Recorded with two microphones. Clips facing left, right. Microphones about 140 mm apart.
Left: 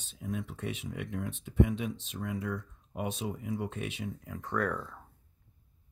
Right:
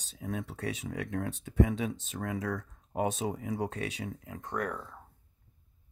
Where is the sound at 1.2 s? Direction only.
55° right (ahead or behind).